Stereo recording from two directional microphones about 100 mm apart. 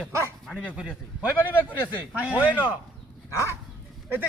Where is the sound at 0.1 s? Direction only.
30° right (ahead or behind).